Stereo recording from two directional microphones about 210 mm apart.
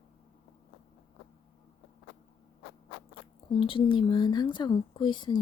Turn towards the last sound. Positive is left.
turn(degrees=20)  # may be behind; listen again after turning